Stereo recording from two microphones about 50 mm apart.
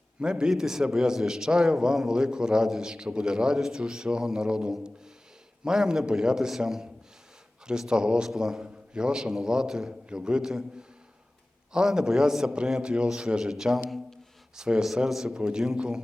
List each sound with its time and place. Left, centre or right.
0.2 s a man's voice: centre
7.7 s a man's voice: centre
8.6 s a man's voice: centre